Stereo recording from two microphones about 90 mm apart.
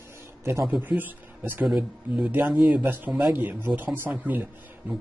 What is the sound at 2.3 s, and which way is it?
Speech, 20° right (ahead or behind).